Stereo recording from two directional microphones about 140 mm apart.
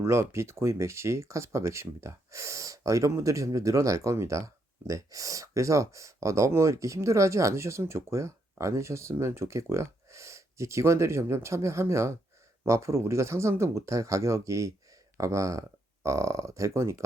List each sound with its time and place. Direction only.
0.0 s speech: 20° right (ahead or behind)